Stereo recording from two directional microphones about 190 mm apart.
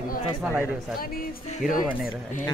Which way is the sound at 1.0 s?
50° left (ahead or behind).